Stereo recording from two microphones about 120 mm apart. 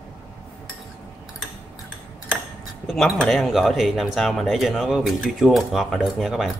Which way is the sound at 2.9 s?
Centre (ahead or behind).